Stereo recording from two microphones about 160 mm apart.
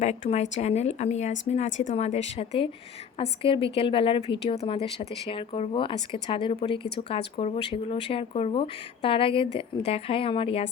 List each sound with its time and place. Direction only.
0.0 s a woman's voice: 40° left (ahead or behind)